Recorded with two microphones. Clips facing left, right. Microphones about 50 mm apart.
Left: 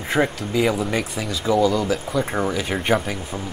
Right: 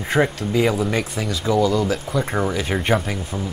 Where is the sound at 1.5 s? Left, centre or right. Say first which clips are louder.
Even; centre.